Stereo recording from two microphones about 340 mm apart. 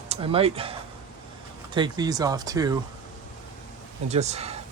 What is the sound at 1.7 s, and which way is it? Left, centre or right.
Speech, centre.